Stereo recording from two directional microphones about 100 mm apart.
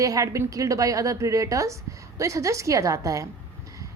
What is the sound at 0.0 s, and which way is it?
A woman's voice, 35° right (ahead or behind).